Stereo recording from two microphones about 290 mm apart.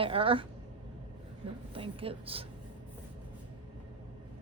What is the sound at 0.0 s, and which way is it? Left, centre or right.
Speech, centre.